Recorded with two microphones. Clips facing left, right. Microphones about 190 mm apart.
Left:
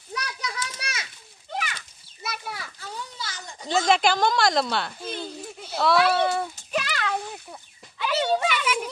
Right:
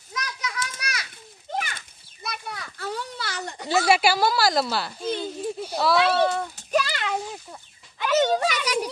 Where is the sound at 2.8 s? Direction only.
65° right (ahead or behind).